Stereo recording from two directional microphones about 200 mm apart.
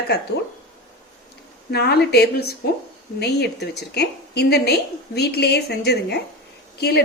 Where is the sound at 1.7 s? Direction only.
55° left (ahead or behind).